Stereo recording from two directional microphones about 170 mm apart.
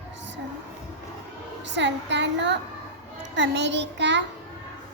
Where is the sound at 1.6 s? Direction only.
90° right.